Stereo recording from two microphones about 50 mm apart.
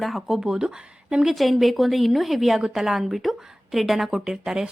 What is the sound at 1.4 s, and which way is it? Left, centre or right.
Speech, centre.